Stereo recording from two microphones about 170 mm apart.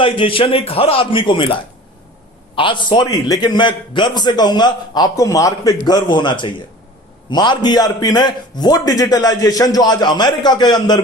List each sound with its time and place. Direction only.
0.0 s a man's voice: 30° left (ahead or behind)
2.6 s a man's voice: 30° left (ahead or behind)